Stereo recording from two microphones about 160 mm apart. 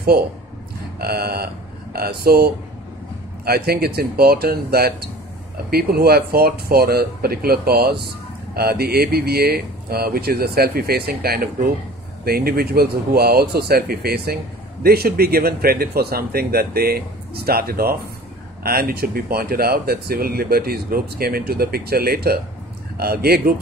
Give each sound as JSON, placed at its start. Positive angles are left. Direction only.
{"t": 0.9, "sound": "speech", "side_deg": -75}